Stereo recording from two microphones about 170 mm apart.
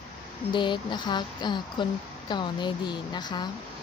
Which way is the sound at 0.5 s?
25° left (ahead or behind).